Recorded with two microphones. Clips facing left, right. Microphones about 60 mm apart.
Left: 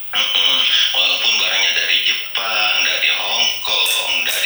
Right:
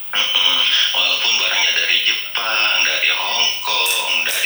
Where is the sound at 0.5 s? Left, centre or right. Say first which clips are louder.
Even; right.